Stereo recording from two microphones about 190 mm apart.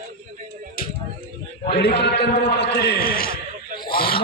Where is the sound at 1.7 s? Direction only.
60° left (ahead or behind).